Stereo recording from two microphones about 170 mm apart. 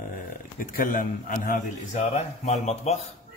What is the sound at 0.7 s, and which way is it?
Speech, 55° left (ahead or behind).